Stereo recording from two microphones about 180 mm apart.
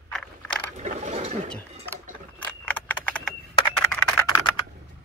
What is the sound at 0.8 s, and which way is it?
Mechanisms, 40° right (ahead or behind).